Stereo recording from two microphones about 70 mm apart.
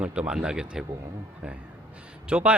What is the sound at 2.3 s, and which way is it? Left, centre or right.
Speech, centre.